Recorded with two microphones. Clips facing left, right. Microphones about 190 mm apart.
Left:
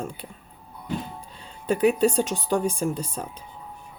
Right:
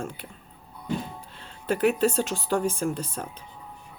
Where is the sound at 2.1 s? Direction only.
15° left (ahead or behind).